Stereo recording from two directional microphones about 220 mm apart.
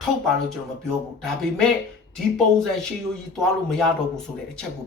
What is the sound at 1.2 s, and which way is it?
Speech, 5° left (ahead or behind).